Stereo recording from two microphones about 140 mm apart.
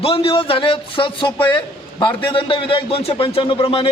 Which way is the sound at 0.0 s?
40° left (ahead or behind).